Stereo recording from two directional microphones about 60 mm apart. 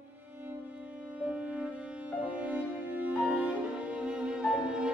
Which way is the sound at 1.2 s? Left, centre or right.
Right.